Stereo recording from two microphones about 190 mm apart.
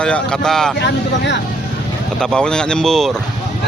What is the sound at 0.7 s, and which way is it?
Speech, 65° left (ahead or behind).